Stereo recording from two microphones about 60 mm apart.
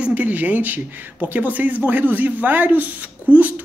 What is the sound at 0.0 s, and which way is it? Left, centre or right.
Speech, right.